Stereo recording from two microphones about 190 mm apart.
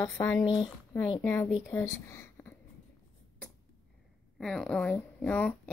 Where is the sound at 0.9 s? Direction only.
15° left (ahead or behind).